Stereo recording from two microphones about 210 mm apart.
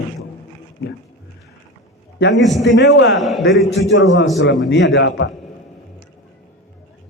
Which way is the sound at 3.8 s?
60° left (ahead or behind).